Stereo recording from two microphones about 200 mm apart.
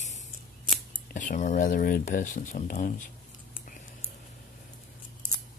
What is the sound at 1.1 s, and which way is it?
Speech, 40° left (ahead or behind).